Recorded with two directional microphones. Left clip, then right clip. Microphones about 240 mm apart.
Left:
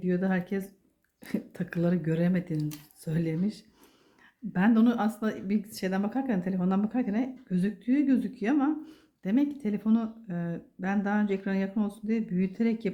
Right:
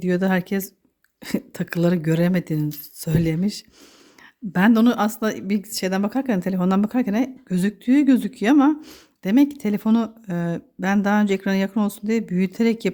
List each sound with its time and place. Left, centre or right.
0.0 s speech: right